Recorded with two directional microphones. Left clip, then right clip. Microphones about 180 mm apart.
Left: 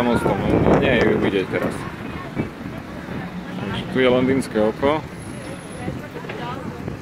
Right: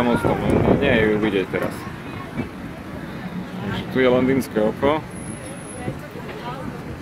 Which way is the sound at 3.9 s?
10° left (ahead or behind).